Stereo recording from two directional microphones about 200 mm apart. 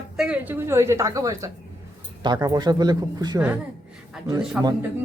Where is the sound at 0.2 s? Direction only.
5° right (ahead or behind).